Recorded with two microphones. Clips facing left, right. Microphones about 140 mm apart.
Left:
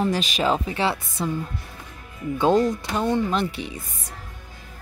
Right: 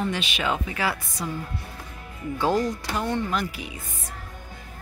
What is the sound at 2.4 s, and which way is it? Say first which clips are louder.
Speech: left 5 dB; 20° left (ahead or behind).